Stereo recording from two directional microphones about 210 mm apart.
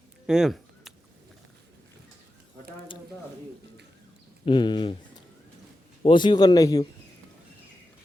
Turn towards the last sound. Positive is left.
turn(degrees=15)  # may be behind; listen again after turning